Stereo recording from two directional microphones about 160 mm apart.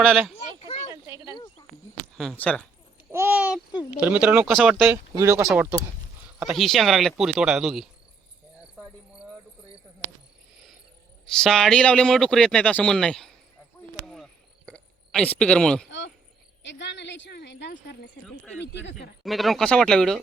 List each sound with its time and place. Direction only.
0.0 s speech: centre (ahead or behind)
0.9 s a sound: 20° right (ahead or behind)
1.3 s cricket: 30° left (ahead or behind)
2.4 s speech: 10° left (ahead or behind)
3.1 s a sound: 15° right (ahead or behind)
4.0 s speech: 10° right (ahead or behind)
5.2 s speech: 20° right (ahead or behind)
6.4 s speech: centre (ahead or behind)
11.3 s speech: 5° left (ahead or behind)
14.7 s a sound: 5° left (ahead or behind)
15.9 s cricket: 90° left
18.6 s speech: 90° left
19.2 s speech: centre (ahead or behind)